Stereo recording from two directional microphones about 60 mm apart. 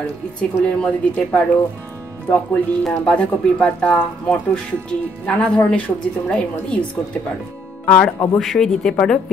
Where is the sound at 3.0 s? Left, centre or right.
Left.